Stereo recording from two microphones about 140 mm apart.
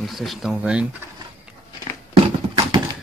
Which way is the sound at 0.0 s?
Centre (ahead or behind).